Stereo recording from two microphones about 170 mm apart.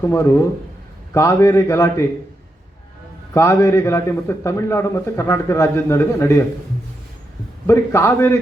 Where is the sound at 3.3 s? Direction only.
15° left (ahead or behind).